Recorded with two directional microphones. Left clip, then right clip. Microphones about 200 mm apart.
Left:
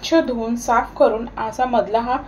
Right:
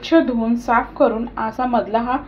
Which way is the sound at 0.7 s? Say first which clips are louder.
Left 1 dB; 25° right (ahead or behind).